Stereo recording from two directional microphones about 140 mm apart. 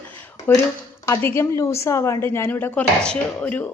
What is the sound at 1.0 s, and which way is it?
A woman's voice, 20° left (ahead or behind).